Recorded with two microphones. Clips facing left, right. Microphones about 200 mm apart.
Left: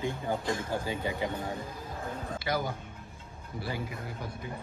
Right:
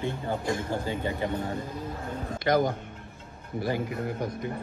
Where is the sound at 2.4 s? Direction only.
50° right (ahead or behind).